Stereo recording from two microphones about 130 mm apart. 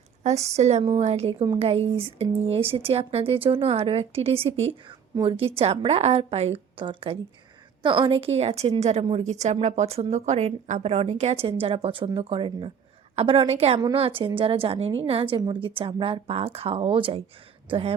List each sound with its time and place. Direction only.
0.2 s speech: 60° right (ahead or behind)